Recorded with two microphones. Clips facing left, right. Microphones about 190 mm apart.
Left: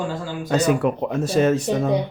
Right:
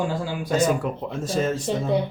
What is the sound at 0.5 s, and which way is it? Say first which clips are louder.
Speech: left 3 dB; 70° left (ahead or behind).